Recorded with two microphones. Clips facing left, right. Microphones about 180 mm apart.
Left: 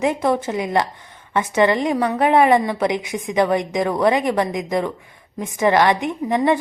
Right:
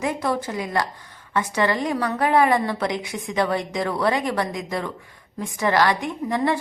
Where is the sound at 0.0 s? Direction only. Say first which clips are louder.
Left 5 dB; 20° left (ahead or behind).